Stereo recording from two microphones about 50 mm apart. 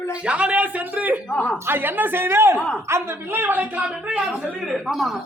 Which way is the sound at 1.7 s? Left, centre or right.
Right.